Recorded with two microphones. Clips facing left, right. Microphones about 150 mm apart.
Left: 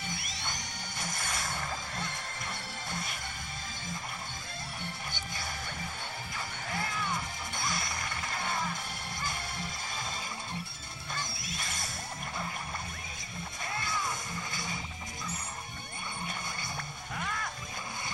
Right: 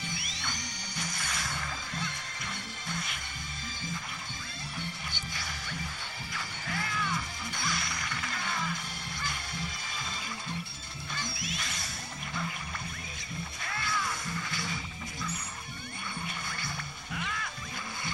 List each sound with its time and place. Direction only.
1.1 s music: 50° left (ahead or behind)
6.3 s music: 25° left (ahead or behind)
13.7 s music: 20° left (ahead or behind)
17.1 s music: 45° left (ahead or behind)